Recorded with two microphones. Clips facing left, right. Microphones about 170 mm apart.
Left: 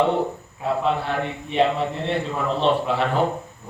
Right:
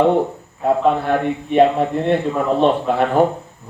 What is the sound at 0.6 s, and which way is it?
Speech, 50° right (ahead or behind).